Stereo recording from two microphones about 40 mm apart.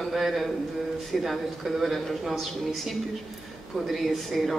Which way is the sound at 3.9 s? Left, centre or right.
Centre.